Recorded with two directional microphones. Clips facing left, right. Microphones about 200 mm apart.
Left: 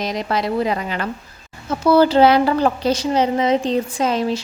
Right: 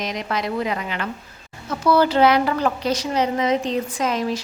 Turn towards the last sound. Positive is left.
turn(degrees=30)  # may be behind; listen again after turning